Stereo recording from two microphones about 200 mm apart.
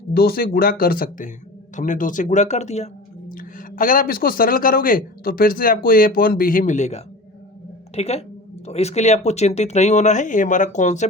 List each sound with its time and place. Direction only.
0.1 s speech: 50° left (ahead or behind)